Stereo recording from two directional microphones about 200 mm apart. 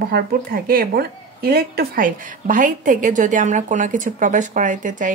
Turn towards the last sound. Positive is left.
turn(degrees=-40)  # may be behind; listen again after turning